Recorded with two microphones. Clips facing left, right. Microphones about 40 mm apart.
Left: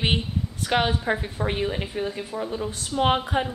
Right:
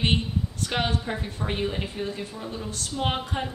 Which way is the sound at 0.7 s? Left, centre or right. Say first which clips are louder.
Left 6 dB; centre.